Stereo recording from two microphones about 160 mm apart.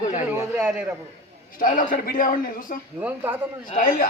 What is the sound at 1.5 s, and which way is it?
A man's voice, 60° left (ahead or behind).